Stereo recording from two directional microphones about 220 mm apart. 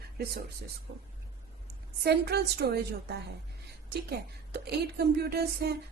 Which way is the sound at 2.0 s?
45° right (ahead or behind).